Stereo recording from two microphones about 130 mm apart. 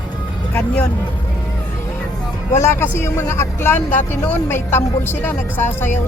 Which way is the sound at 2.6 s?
20° left (ahead or behind).